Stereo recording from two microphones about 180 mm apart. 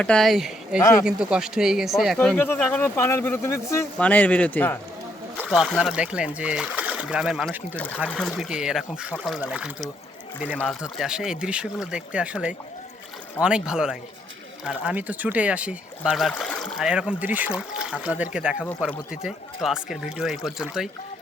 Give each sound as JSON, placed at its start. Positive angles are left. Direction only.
{"t": 0.0, "sound": "speech", "side_deg": 5}
{"t": 0.8, "sound": "speech", "side_deg": 15}
{"t": 1.0, "sound": "speech", "side_deg": -5}
{"t": 2.1, "sound": "speech", "side_deg": 10}
{"t": 5.4, "sound": "speech", "side_deg": 0}